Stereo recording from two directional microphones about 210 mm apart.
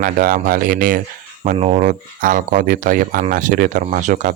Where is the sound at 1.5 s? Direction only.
30° right (ahead or behind).